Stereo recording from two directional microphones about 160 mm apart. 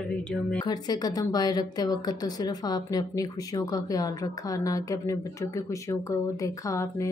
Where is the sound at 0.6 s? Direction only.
25° left (ahead or behind).